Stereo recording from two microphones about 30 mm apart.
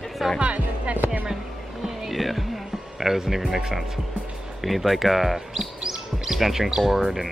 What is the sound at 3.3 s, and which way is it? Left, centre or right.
Speech, centre.